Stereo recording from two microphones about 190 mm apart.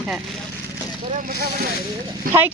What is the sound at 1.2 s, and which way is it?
Speech, 55° right (ahead or behind).